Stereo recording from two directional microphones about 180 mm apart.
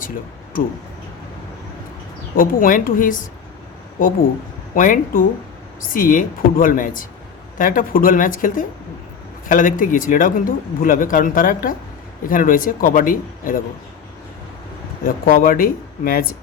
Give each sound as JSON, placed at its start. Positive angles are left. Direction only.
{"t": 2.3, "sound": "speech", "side_deg": 50}
{"t": 4.7, "sound": "speech", "side_deg": 50}
{"t": 15.0, "sound": "speech", "side_deg": 55}